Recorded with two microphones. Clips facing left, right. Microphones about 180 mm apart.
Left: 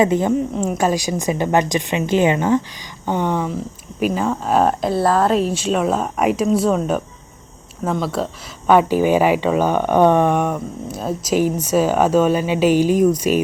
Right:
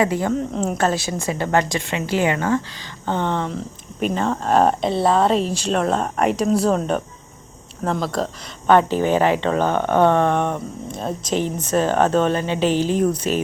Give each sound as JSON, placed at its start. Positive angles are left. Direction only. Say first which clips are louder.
{"t": 0.0, "sound": "speech", "louder": "left 4 dB", "side_deg": 20}
{"t": 0.5, "sound": "speech", "louder": "left 2 dB", "side_deg": 5}